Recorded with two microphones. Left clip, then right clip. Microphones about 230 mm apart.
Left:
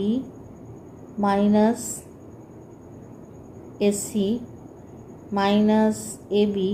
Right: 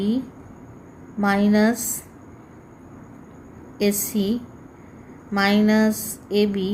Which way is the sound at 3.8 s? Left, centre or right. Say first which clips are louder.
Even; right.